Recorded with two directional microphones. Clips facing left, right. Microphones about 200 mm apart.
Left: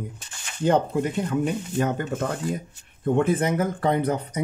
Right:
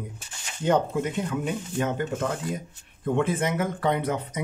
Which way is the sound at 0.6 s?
40° left (ahead or behind).